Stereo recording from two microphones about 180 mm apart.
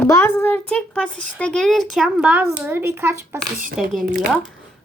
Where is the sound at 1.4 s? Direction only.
5° left (ahead or behind).